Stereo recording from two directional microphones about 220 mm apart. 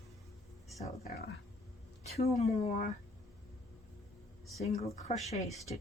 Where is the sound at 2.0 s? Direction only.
30° left (ahead or behind).